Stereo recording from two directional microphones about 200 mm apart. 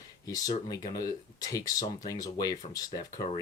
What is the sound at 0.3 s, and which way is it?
Speech, 20° left (ahead or behind).